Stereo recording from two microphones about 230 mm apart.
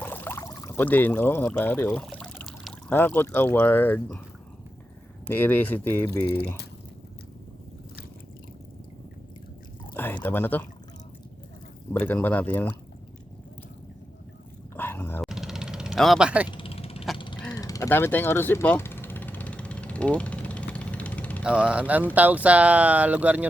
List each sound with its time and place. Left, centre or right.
0.0 s speech: centre
5.3 s speech: centre
9.9 s speech: centre
11.9 s speech: centre
14.8 s dog: centre
15.3 s vehicle: centre
16.5 s vehicle: left
17.2 s a sound: left
17.5 s vehicle: centre
21.4 s speech: centre